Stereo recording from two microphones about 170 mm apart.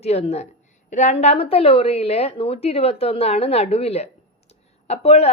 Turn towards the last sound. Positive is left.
turn(degrees=40)  # may be behind; listen again after turning